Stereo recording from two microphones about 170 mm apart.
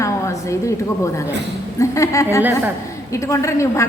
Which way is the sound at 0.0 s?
15° left (ahead or behind).